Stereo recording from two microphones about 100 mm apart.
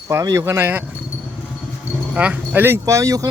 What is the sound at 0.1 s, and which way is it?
Speech, 30° right (ahead or behind).